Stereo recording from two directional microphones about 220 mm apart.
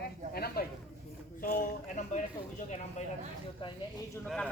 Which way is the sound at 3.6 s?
20° left (ahead or behind).